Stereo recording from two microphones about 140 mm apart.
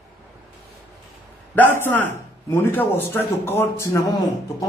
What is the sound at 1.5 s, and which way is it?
A man's voice, 15° left (ahead or behind).